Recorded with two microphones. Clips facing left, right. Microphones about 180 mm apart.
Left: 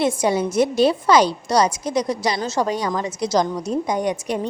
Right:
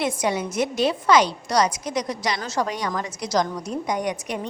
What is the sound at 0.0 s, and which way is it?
A woman's voice, 30° left (ahead or behind).